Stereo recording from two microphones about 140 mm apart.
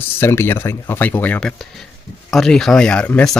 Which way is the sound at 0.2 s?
15° left (ahead or behind).